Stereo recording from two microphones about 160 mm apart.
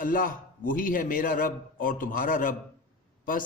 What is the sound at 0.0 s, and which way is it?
A man's voice, 60° left (ahead or behind).